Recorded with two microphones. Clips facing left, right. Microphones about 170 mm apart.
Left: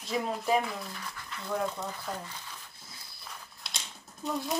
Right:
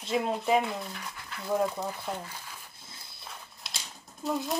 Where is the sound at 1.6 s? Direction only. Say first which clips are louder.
Right 3 dB; 5° right (ahead or behind).